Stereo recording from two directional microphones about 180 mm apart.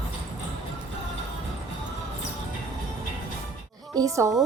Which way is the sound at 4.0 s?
15° right (ahead or behind).